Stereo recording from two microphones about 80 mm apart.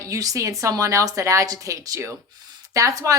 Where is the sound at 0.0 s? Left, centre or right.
Right.